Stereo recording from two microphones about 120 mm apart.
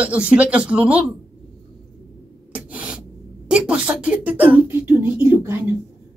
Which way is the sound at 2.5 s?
10° right (ahead or behind).